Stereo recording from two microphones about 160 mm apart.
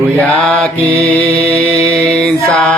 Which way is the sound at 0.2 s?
10° left (ahead or behind).